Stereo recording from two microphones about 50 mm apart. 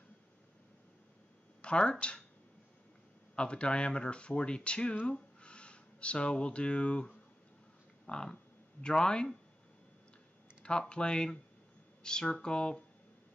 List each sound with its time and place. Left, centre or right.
1.6 s speech: left
3.3 s speech: left
10.6 s speech: centre